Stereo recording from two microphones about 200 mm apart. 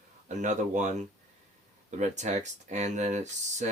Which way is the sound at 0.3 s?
35° right (ahead or behind).